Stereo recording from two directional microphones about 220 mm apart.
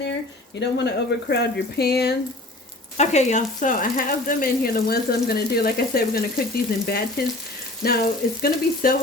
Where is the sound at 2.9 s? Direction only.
30° left (ahead or behind).